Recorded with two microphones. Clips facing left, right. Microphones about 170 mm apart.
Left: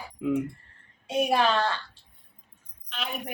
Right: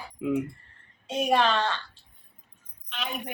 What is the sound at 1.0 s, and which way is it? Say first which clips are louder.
Speech: even; 10° left (ahead or behind).